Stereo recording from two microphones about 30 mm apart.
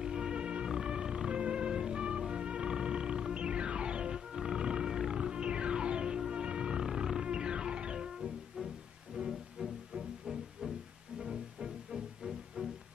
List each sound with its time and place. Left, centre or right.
0.0 s music: right
4.3 s music: centre
5.1 s music: right
9.1 s music: centre
11.1 s music: right
12.6 s music: right